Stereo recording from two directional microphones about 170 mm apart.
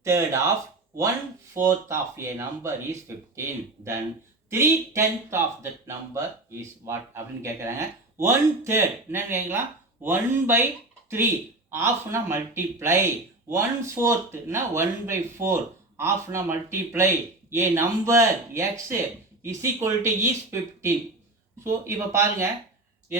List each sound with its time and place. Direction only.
0.0 s speech: 15° right (ahead or behind)
1.5 s speech: 15° right (ahead or behind)
11.7 s speech: 15° right (ahead or behind)